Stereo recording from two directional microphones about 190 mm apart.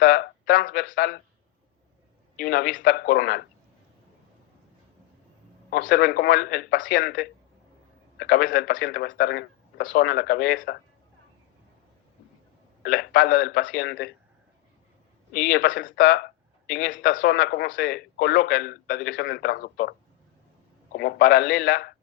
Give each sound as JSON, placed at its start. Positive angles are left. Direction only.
{"t": 0.0, "sound": "speech", "side_deg": 50}
{"t": 2.4, "sound": "speech", "side_deg": 50}
{"t": 5.7, "sound": "speech", "side_deg": 45}
{"t": 12.8, "sound": "speech", "side_deg": 50}
{"t": 15.3, "sound": "speech", "side_deg": 45}
{"t": 20.9, "sound": "speech", "side_deg": 55}